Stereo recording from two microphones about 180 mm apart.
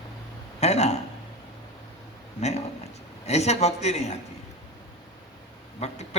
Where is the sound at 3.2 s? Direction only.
35° left (ahead or behind).